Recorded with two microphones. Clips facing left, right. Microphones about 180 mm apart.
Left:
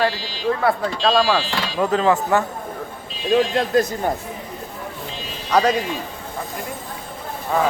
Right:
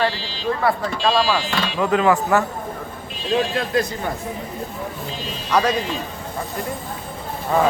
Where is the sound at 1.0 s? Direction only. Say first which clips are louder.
Left 1 dB; 60° left (ahead or behind).